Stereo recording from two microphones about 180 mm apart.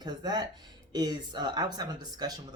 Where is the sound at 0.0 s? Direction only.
25° right (ahead or behind).